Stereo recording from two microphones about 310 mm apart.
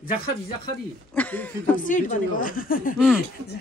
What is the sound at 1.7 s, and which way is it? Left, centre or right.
Speech, left.